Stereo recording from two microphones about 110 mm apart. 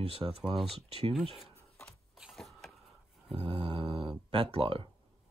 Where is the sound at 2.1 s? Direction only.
Centre (ahead or behind).